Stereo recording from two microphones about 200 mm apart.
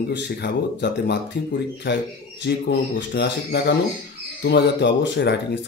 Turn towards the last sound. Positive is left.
turn(degrees=60)  # may be behind; listen again after turning